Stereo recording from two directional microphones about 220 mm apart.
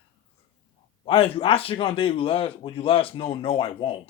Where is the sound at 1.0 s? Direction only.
25° left (ahead or behind).